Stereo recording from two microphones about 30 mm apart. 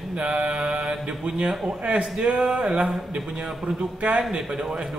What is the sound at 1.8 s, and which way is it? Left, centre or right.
Speech, right.